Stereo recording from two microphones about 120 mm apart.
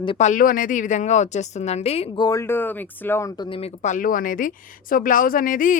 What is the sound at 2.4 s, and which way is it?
Speech, 15° left (ahead or behind).